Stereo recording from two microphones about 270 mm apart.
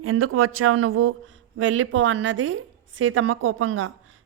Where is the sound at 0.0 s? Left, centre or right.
Right.